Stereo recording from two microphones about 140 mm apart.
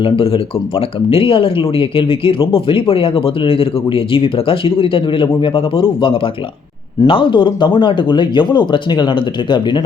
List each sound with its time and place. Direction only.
0.0 s speech: 40° left (ahead or behind)